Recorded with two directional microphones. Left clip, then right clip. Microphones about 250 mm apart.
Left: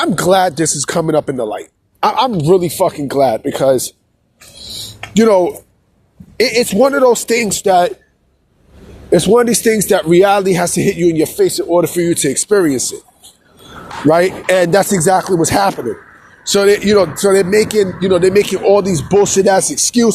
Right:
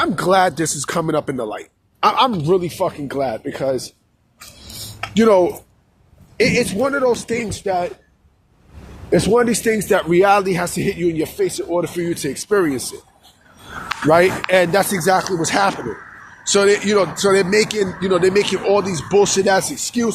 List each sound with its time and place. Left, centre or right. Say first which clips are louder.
0.0 s speech: left 3 dB; left
5.1 s speech: left 3 dB; left
9.0 s speech: left 5 dB; left
14.1 s speech: left 2 dB; left